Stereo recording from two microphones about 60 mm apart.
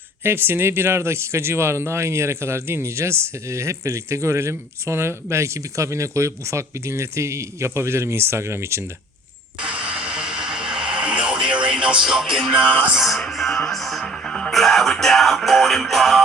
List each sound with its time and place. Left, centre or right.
0.2 s speech: right
9.6 s music: right; by 16.2 s centre